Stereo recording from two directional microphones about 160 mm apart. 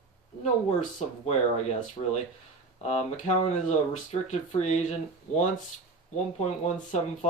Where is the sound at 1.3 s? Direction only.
45° left (ahead or behind).